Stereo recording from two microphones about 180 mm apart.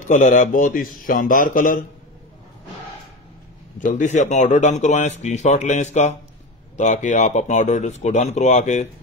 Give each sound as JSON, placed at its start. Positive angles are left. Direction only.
{"t": 0.0, "sound": "a man's voice", "side_deg": 45}
{"t": 3.8, "sound": "speech", "side_deg": 45}